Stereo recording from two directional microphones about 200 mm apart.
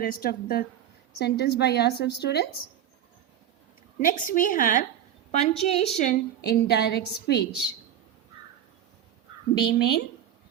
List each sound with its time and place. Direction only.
0.0 s a woman's voice: 45° left (ahead or behind)
4.0 s a woman's voice: 40° left (ahead or behind)
6.4 s a woman's voice: 55° left (ahead or behind)
9.6 s a woman's voice: 55° left (ahead or behind)